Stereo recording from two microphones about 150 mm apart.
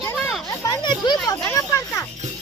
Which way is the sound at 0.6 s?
25° left (ahead or behind).